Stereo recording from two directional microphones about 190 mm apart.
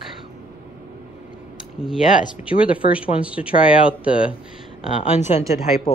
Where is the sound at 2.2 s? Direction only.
40° left (ahead or behind).